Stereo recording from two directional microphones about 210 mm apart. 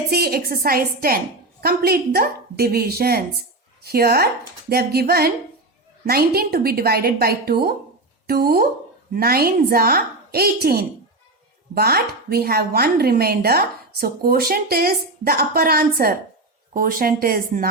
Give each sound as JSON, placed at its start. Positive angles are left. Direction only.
{"t": 0.1, "sound": "speech", "side_deg": -45}